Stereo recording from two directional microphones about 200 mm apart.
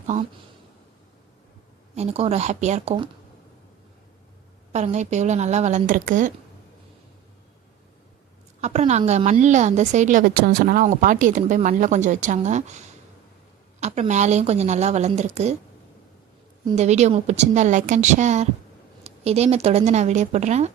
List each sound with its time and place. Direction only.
2.0 s a woman's voice: 30° right (ahead or behind)
4.7 s a woman's voice: 35° right (ahead or behind)
8.6 s a woman's voice: 35° right (ahead or behind)
16.7 s a woman's voice: 35° right (ahead or behind)